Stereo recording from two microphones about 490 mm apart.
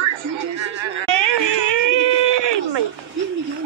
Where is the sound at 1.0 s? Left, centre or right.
Right.